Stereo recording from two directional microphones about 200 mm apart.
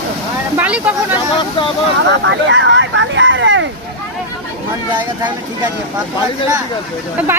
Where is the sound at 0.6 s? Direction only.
5° right (ahead or behind).